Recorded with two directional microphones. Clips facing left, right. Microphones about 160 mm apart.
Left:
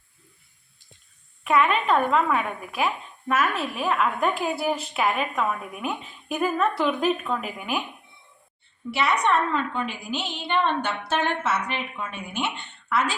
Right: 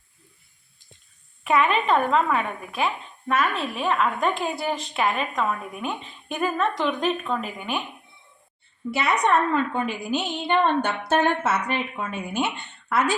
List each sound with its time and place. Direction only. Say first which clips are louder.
1.5 s speech: even; centre (ahead or behind)
8.9 s a woman's voice: right 1 dB; 45° right (ahead or behind)